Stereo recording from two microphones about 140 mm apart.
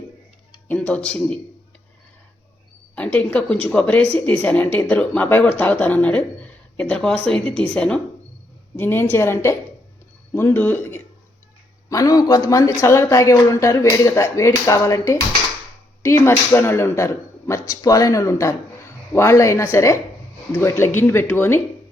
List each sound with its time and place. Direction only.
0.7 s speech: 10° left (ahead or behind)
2.9 s speech: 10° left (ahead or behind)